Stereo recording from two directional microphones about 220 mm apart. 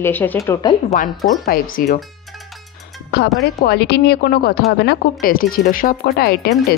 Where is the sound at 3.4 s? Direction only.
50° left (ahead or behind).